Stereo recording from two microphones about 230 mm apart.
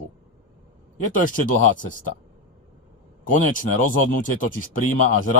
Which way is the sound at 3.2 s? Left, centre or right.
Left.